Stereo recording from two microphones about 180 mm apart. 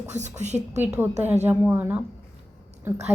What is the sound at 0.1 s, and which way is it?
Speech, 40° right (ahead or behind).